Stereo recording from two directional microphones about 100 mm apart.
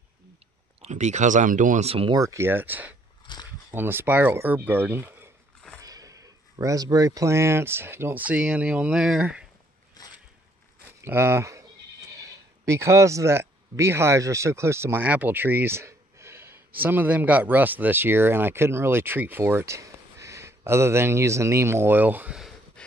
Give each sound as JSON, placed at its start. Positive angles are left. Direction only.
{"t": 1.8, "sound": "speech", "side_deg": -90}
{"t": 2.1, "sound": "speech", "side_deg": -30}
{"t": 5.8, "sound": "speech", "side_deg": -35}
{"t": 11.0, "sound": "speech", "side_deg": -25}
{"t": 22.8, "sound": "a sound", "side_deg": 10}